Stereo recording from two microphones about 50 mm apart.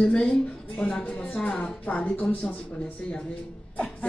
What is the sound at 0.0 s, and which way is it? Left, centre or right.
Speech, centre.